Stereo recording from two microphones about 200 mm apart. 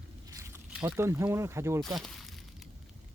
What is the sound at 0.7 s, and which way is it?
Speech, 10° right (ahead or behind).